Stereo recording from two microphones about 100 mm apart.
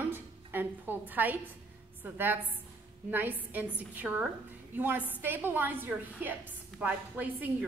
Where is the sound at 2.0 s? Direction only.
20° right (ahead or behind).